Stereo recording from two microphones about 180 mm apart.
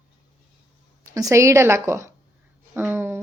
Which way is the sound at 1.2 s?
15° right (ahead or behind).